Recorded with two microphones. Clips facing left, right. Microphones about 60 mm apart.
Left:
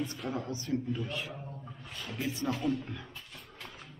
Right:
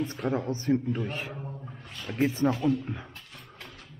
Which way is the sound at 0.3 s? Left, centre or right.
Right.